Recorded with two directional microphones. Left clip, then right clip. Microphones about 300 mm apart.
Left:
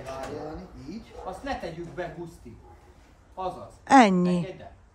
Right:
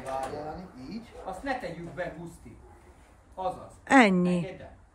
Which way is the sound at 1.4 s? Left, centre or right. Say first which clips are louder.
Right 1 dB; centre.